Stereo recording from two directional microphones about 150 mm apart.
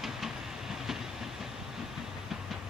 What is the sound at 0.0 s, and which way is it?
Train, centre (ahead or behind).